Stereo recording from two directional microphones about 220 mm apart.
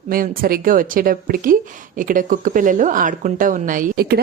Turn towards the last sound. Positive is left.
turn(degrees=-45)  # may be behind; listen again after turning